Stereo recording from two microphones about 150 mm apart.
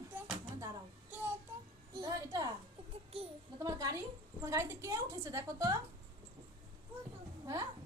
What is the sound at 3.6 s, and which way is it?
A woman's voice, 20° right (ahead or behind).